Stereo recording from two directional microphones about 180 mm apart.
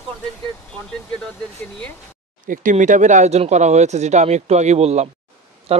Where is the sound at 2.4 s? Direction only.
45° right (ahead or behind).